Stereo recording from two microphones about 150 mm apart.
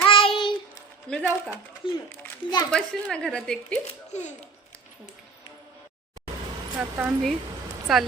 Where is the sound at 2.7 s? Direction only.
5° left (ahead or behind).